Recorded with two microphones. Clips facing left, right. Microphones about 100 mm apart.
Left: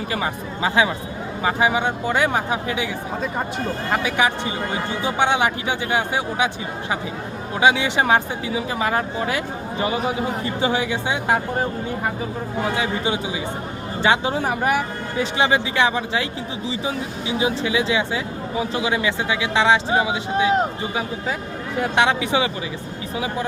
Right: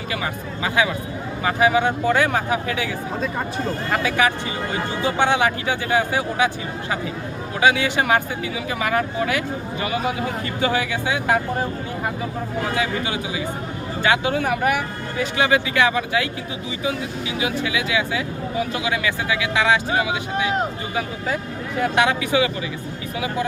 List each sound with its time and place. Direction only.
0.1 s speech: 30° left (ahead or behind)
3.9 s speech: 20° left (ahead or behind)
7.6 s speech: 20° left (ahead or behind)
12.7 s speech: 25° left (ahead or behind)
21.8 s speech: 25° left (ahead or behind)